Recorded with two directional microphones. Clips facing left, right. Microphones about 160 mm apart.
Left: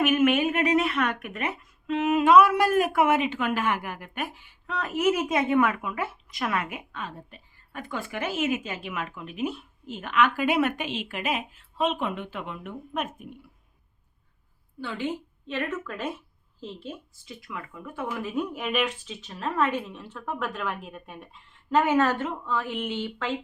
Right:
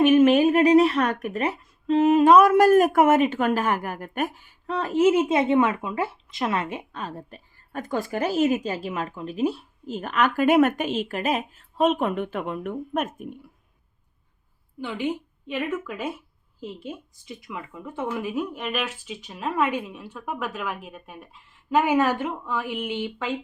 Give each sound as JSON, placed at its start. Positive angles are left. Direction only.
{"t": 0.0, "sound": "speech", "side_deg": -35}
{"t": 14.8, "sound": "speech", "side_deg": -15}
{"t": 18.3, "sound": "speech", "side_deg": 0}
{"t": 19.0, "sound": "speech", "side_deg": -10}